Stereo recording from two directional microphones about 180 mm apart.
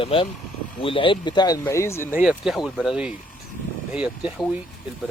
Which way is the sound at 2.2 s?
5° right (ahead or behind).